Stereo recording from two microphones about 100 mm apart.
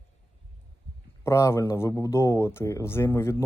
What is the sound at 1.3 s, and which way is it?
Speech, 30° left (ahead or behind).